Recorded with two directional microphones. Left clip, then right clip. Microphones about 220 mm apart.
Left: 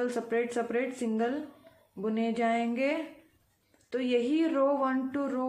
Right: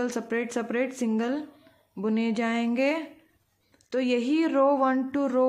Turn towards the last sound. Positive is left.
turn(degrees=-40)  # may be behind; listen again after turning